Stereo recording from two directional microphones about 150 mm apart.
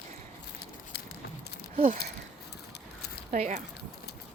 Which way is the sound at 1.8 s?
65° right (ahead or behind).